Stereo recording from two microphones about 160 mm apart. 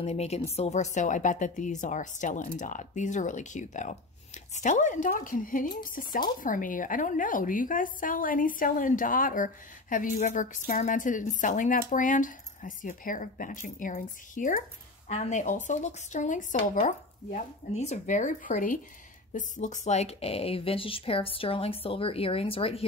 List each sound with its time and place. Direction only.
0.0 s a woman's voice: 40° left (ahead or behind)